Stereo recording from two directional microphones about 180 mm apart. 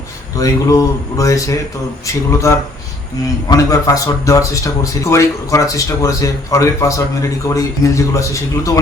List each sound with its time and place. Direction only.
0.3 s a man's voice: 20° left (ahead or behind)